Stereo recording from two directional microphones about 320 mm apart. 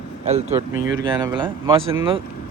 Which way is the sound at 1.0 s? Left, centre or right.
Centre.